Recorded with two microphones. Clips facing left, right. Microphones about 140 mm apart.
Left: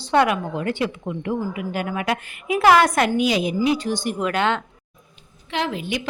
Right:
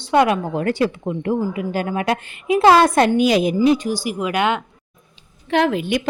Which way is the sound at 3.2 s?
50° right (ahead or behind).